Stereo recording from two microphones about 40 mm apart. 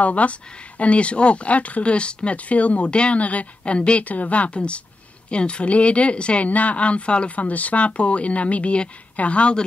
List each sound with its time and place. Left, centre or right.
0.0 s speech: left
4.0 s speech: left